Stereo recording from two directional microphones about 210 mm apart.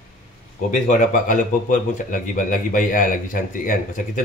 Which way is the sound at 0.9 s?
40° left (ahead or behind).